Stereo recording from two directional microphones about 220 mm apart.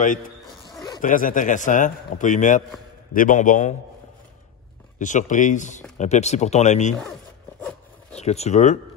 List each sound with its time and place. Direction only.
1.0 s a man's voice: 35° left (ahead or behind)
4.9 s a man's voice: 35° left (ahead or behind)
8.1 s speech: 30° left (ahead or behind)